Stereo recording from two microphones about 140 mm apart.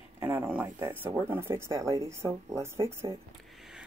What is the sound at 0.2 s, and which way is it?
Speech, 15° right (ahead or behind).